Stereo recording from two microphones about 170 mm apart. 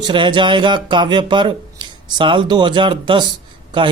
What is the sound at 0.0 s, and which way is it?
Speech, 25° right (ahead or behind).